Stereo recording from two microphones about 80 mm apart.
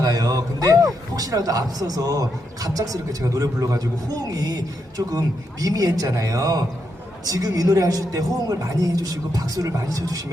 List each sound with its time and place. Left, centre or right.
0.0 s a man's voice: right